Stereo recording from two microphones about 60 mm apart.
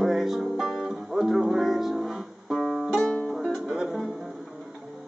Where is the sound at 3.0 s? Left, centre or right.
Centre.